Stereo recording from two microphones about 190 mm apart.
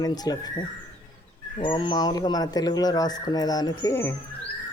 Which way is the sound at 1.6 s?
25° left (ahead or behind).